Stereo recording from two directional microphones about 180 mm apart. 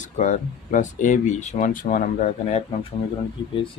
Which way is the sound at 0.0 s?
45° left (ahead or behind).